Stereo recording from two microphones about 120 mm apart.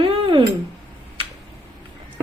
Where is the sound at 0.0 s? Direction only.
45° right (ahead or behind).